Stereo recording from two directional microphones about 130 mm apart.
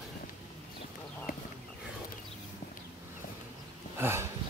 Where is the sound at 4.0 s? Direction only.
20° right (ahead or behind).